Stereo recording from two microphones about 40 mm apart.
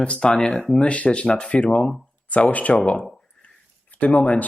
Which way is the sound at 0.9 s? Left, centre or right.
Left.